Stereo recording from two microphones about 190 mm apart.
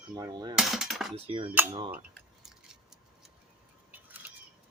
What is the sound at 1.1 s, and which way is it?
Speech, 30° right (ahead or behind).